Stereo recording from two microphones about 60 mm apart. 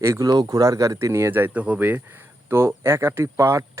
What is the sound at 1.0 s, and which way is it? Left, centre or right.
Speech, right.